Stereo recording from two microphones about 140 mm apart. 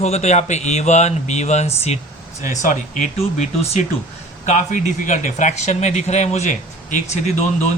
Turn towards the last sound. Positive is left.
turn(degrees=55)  # may be behind; listen again after turning